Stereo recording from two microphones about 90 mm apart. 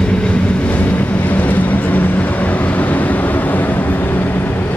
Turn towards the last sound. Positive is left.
turn(degrees=20)  # may be behind; listen again after turning